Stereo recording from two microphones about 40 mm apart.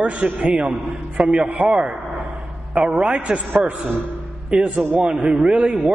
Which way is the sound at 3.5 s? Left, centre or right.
Right.